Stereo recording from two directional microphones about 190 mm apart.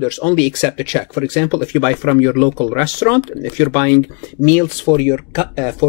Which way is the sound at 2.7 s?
35° left (ahead or behind).